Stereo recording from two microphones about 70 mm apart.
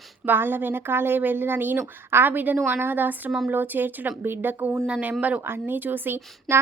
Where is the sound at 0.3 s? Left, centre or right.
Right.